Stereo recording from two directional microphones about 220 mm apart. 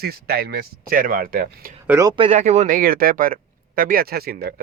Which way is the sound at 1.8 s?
10° right (ahead or behind).